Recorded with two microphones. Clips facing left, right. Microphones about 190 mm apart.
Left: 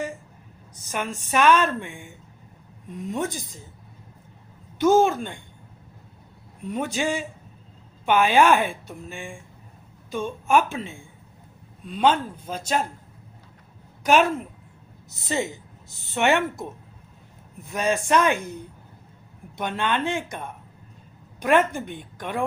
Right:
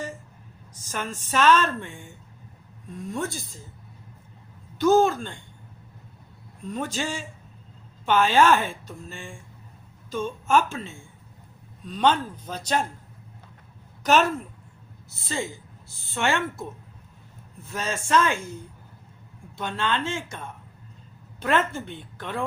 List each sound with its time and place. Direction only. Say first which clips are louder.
0.9 s a woman's voice: left 3 dB; 15° left (ahead or behind)
4.8 s a woman's voice: left 1 dB; 15° left (ahead or behind)
6.7 s a woman's voice: left 4 dB; 15° left (ahead or behind)
14.0 s a woman's voice: left 2 dB; 10° left (ahead or behind)